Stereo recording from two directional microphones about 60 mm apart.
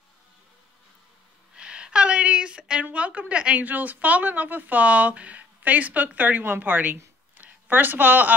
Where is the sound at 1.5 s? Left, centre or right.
Centre.